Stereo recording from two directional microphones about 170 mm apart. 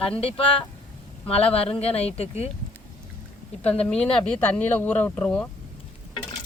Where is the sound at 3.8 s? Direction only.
5° left (ahead or behind).